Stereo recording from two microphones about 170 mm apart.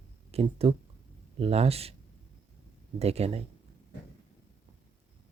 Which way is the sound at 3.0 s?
40° right (ahead or behind).